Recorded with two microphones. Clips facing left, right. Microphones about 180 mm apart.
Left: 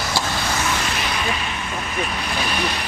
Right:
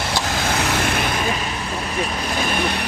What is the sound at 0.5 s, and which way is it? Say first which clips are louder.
Vehicle: right 5 dB; 60° right (ahead or behind).